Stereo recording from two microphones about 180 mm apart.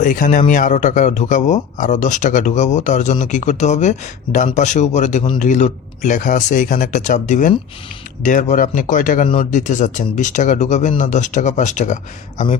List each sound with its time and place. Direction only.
0.0 s a man's voice: 45° left (ahead or behind)
9.2 s speech: 35° left (ahead or behind)